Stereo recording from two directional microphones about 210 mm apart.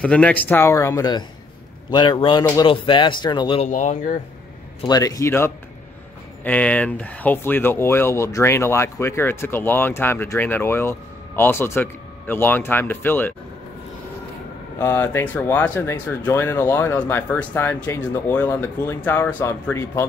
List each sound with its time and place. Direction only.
0.0 s speech: 5° left (ahead or behind); by 4.2 s 35° left (ahead or behind)
4.8 s speech: 15° left (ahead or behind)
14.8 s speech: 10° left (ahead or behind)